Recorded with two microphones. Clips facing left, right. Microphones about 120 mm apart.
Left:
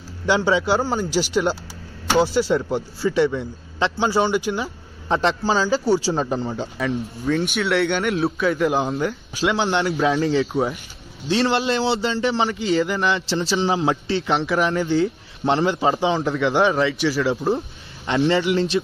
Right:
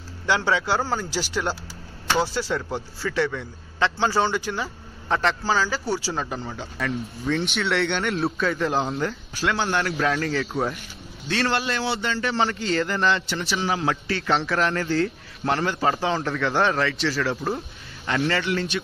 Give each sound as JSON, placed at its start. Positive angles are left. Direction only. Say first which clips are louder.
{"t": 0.3, "sound": "a man's voice", "louder": "left 4 dB", "side_deg": 20}
{"t": 6.8, "sound": "speech", "louder": "left 2 dB", "side_deg": 5}
{"t": 9.4, "sound": "a man's voice", "louder": "left 4 dB", "side_deg": 20}
{"t": 9.8, "sound": "speech", "louder": "left 4 dB", "side_deg": 5}
{"t": 10.1, "sound": "a man's voice", "louder": "left 6 dB", "side_deg": 20}
{"t": 10.4, "sound": "speech", "louder": "left 4 dB", "side_deg": 5}
{"t": 11.2, "sound": "a man's voice", "louder": "left 5 dB", "side_deg": 25}
{"t": 12.6, "sound": "speech", "louder": "left 3 dB", "side_deg": 5}
{"t": 13.3, "sound": "a man's voice", "louder": "left 5 dB", "side_deg": 30}
{"t": 14.9, "sound": "a man's voice", "louder": "left 4 dB", "side_deg": 20}
{"t": 17.6, "sound": "speech", "louder": "left 5 dB", "side_deg": 25}